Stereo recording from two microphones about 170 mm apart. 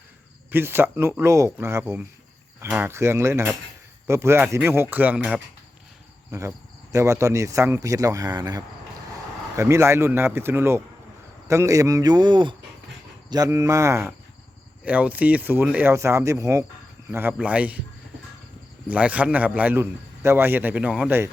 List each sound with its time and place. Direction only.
0.5 s a man's voice: 15° right (ahead or behind)
6.3 s a man's voice: 20° right (ahead or behind)
18.9 s a man's voice: 10° right (ahead or behind)